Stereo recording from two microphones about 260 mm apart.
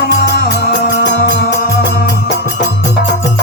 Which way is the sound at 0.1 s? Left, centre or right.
Left.